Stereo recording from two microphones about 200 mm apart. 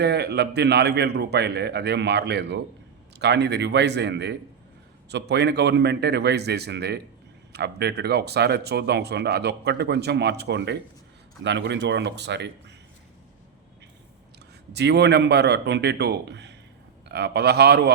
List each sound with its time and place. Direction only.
0.0 s speech: 55° right (ahead or behind)
14.7 s speech: 55° right (ahead or behind)